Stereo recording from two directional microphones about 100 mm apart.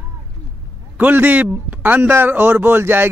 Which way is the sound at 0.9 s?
15° right (ahead or behind).